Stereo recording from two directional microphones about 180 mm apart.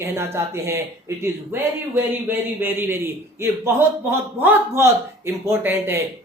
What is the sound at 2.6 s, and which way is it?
Speech, 10° right (ahead or behind).